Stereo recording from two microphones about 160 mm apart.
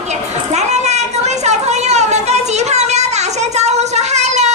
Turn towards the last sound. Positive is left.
turn(degrees=-45)  # may be behind; listen again after turning